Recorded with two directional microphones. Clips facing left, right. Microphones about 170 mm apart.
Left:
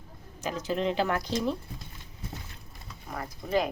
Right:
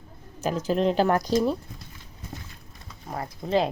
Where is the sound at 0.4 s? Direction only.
40° right (ahead or behind).